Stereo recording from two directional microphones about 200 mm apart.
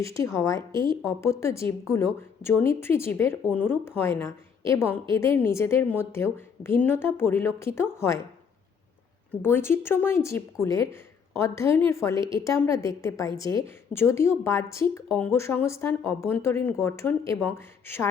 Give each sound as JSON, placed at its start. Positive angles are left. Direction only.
{"t": 0.0, "sound": "speech", "side_deg": 15}
{"t": 9.3, "sound": "speech", "side_deg": 10}
{"t": 12.1, "sound": "a woman's voice", "side_deg": -25}
{"t": 12.5, "sound": "speech", "side_deg": 15}